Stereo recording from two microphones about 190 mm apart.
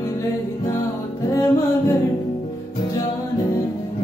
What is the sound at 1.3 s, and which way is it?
Music, 15° left (ahead or behind).